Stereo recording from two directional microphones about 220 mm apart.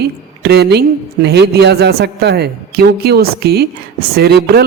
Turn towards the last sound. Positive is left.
turn(degrees=-45)  # may be behind; listen again after turning